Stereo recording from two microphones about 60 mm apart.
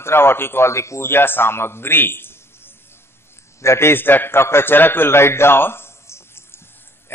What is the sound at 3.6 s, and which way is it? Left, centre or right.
A man's voice, left.